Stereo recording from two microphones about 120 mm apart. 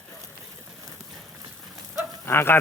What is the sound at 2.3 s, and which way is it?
Speech, 20° left (ahead or behind).